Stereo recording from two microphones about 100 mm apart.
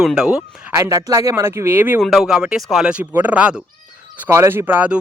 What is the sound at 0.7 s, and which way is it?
Speech, 35° right (ahead or behind).